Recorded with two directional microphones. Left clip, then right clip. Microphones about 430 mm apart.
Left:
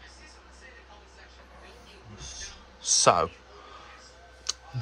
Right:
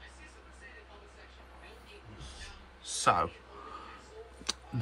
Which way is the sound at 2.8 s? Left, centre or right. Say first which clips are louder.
Left 7 dB; centre.